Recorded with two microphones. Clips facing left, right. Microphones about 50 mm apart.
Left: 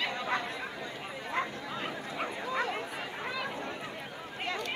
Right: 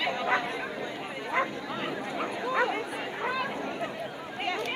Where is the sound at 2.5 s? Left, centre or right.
Right.